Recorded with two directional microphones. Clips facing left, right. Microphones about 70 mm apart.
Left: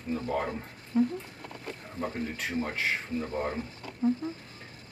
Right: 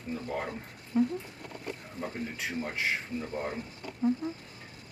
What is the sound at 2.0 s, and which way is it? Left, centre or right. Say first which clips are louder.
Speech: left 4 dB; left.